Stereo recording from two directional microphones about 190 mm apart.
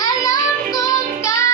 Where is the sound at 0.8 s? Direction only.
15° left (ahead or behind).